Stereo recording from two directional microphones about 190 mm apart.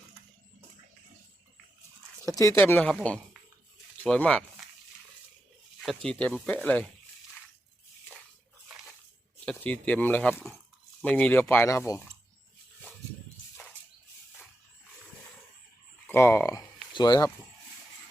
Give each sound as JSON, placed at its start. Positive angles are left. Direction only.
{"t": 2.2, "sound": "speech", "side_deg": 15}
{"t": 5.8, "sound": "speech", "side_deg": 0}
{"t": 9.5, "sound": "speech", "side_deg": 5}
{"t": 16.0, "sound": "speech", "side_deg": 10}